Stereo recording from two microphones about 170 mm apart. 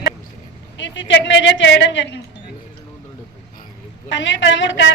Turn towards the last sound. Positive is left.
turn(degrees=90)